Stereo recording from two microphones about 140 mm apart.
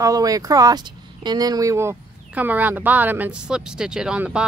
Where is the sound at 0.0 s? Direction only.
25° right (ahead or behind).